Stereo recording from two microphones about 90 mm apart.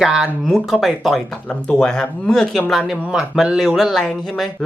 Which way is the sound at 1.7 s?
10° left (ahead or behind).